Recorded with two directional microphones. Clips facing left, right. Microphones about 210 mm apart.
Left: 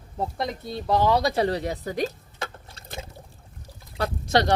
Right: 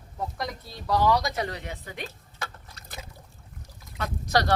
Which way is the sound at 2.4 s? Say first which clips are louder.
Left 4 dB; 30° left (ahead or behind).